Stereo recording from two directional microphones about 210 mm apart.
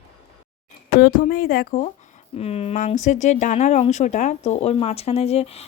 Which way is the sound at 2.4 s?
30° left (ahead or behind).